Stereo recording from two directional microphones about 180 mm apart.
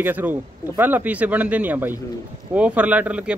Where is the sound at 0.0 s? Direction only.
10° right (ahead or behind).